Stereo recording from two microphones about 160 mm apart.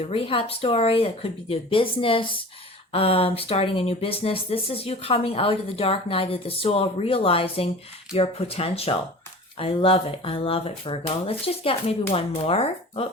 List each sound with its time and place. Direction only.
0.0 s speech: 35° left (ahead or behind)